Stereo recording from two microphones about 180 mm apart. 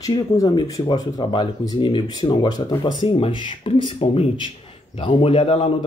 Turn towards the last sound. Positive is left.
turn(degrees=30)  # may be behind; listen again after turning